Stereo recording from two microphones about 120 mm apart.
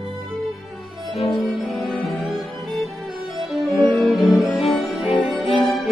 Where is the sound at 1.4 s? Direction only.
Centre (ahead or behind).